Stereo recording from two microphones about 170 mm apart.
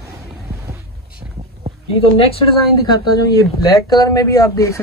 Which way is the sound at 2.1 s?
35° left (ahead or behind).